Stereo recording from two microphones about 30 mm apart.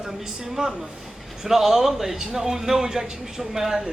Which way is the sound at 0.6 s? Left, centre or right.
Right.